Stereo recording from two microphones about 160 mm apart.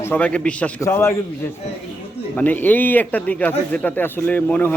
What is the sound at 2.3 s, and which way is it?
A man's voice, 10° left (ahead or behind).